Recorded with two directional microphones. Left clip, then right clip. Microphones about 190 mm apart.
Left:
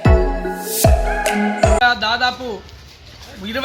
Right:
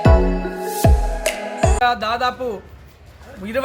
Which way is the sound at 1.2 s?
Centre (ahead or behind).